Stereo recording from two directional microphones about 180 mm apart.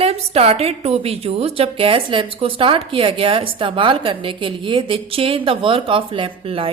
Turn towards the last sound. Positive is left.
turn(degrees=-30)  # may be behind; listen again after turning